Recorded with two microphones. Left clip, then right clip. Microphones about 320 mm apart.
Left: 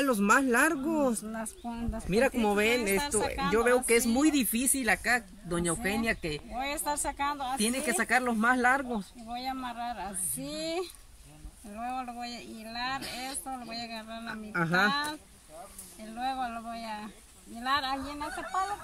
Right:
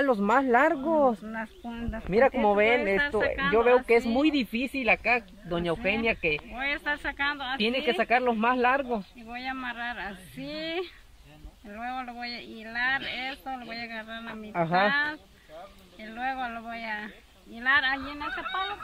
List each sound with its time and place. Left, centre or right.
0.0 s speech: centre
1.3 s speech: centre
2.0 s speech: centre
3.0 s speech: centre
3.8 s speech: centre
6.5 s speech: centre
7.5 s speech: centre
9.3 s speech: centre
16.0 s speech: centre